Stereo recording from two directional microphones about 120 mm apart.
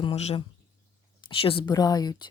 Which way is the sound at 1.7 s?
35° left (ahead or behind).